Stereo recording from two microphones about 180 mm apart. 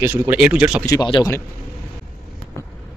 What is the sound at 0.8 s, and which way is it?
Speech, 20° left (ahead or behind).